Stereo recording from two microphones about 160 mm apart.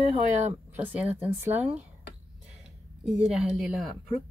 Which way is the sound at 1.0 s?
40° right (ahead or behind).